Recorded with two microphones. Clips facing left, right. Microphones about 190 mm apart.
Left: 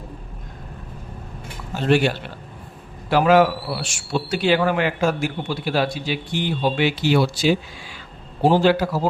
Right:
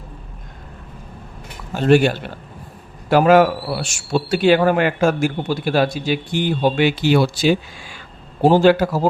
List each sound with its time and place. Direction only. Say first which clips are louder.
1.7 s a man's voice: right 4 dB; 45° right (ahead or behind)